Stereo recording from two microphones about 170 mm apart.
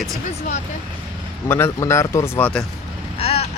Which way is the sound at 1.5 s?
15° left (ahead or behind).